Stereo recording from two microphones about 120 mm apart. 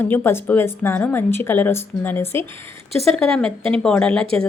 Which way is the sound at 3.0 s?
5° left (ahead or behind).